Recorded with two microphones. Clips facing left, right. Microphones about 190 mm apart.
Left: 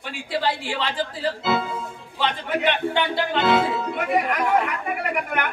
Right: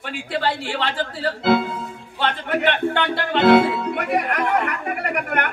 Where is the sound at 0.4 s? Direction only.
60° right (ahead or behind).